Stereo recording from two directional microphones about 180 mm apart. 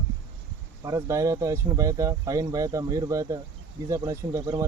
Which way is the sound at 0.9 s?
15° right (ahead or behind).